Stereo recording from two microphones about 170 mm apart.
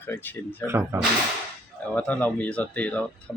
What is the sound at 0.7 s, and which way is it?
Speech, 15° right (ahead or behind).